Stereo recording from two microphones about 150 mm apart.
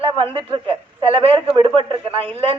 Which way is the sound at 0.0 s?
35° right (ahead or behind).